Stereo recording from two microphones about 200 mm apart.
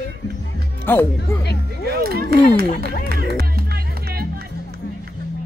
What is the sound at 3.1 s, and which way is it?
Music, 50° right (ahead or behind).